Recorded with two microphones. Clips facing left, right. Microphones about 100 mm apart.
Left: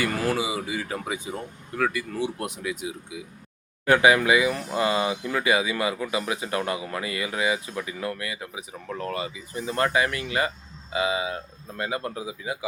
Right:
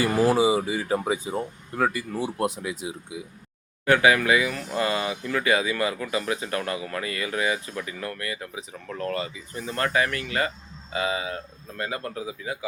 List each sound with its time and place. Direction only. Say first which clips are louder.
0.1 s speech: right 5 dB; 15° right (ahead or behind)
0.3 s speech: right 6 dB; 30° right (ahead or behind)
3.9 s speech: left 1 dB; 20° left (ahead or behind)